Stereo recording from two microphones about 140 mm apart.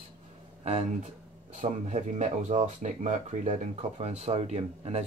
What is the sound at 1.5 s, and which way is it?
Speech, 60° right (ahead or behind).